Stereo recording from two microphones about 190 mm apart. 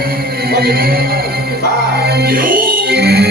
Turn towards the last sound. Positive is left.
turn(degrees=-55)  # may be behind; listen again after turning